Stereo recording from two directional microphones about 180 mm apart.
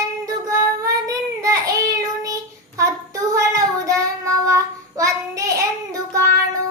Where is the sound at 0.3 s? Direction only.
20° right (ahead or behind).